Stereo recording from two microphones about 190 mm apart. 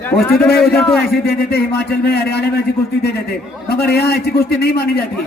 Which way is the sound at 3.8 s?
55° left (ahead or behind).